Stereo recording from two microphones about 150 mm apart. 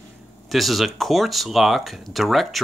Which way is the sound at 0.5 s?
Centre (ahead or behind).